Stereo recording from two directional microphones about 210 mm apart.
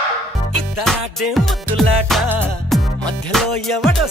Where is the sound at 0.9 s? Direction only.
Centre (ahead or behind).